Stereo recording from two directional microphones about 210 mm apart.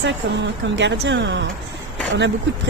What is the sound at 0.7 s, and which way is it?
Speech, 60° right (ahead or behind).